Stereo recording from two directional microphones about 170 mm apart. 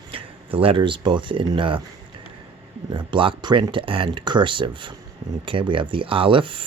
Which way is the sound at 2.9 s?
30° right (ahead or behind).